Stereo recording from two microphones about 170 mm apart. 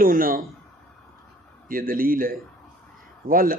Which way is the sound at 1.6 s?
55° right (ahead or behind).